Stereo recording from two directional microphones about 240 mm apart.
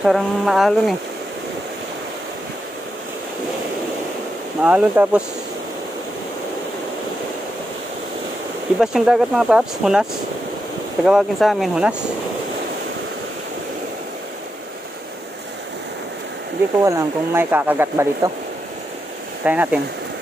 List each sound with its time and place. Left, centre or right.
0.0 s speech: centre
4.6 s speech: centre
8.7 s speech: centre
11.1 s speech: centre
16.8 s speech: centre
19.4 s speech: centre